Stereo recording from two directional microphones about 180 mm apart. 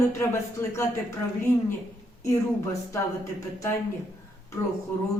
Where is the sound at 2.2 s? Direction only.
15° left (ahead or behind).